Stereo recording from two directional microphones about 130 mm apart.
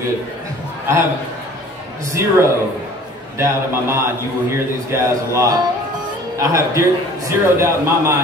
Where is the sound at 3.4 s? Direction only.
20° right (ahead or behind).